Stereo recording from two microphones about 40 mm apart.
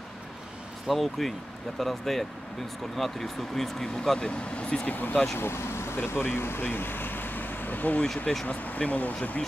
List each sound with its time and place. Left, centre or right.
0.8 s speech: centre
4.3 s speech: left
4.8 s speech: left
5.1 s speech: centre
5.4 s speech: left